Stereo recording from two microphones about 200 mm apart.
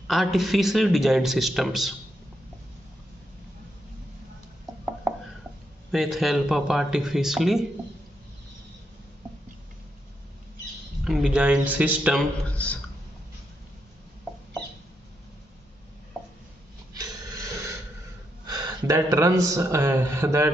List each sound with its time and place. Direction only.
0.0 s a man's voice: centre (ahead or behind)
5.9 s a man's voice: centre (ahead or behind)
11.1 s a man's voice: 5° right (ahead or behind)
16.1 s chopping: centre (ahead or behind)
16.9 s rub: 20° right (ahead or behind)
18.5 s a man's voice: 20° right (ahead or behind)